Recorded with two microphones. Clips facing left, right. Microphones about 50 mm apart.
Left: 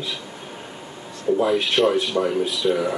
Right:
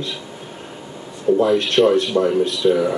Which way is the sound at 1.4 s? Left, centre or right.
Centre.